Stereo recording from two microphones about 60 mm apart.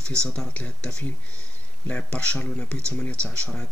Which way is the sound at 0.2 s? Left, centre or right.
Centre.